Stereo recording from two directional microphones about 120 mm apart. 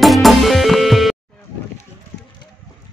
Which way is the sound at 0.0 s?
Centre (ahead or behind).